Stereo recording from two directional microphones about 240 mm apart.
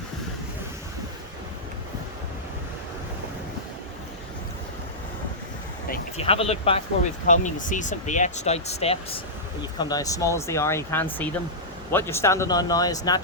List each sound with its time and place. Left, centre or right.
6.1 s speech: left